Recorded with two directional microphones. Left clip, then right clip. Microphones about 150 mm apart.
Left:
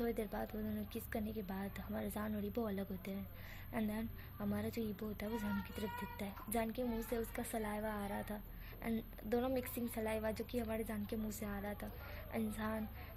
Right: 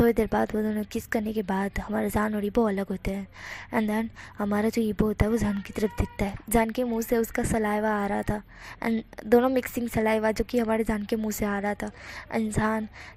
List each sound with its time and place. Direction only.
0.0 s a woman's voice: 45° right (ahead or behind)